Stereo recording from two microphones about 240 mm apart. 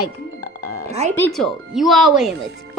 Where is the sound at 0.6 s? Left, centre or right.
Left.